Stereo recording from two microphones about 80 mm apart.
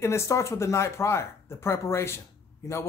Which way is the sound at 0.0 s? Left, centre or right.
Left.